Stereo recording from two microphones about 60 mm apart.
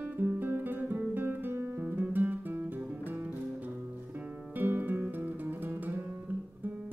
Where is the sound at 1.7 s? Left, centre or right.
Right.